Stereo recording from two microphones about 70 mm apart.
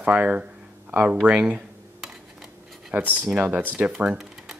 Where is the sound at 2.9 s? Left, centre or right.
Right.